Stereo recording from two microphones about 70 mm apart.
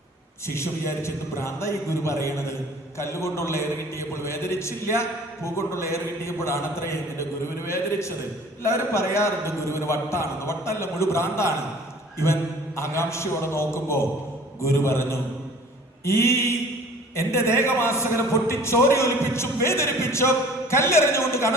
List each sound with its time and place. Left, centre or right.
0.4 s a man's voice: left